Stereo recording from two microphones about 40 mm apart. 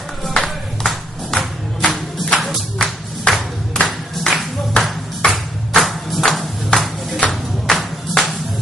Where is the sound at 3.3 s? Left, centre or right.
Left.